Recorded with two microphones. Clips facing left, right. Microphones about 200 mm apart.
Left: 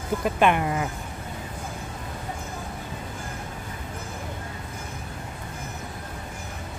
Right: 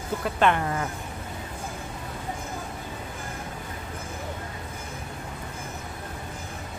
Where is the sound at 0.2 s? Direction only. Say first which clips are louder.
Left 1 dB; 15° left (ahead or behind).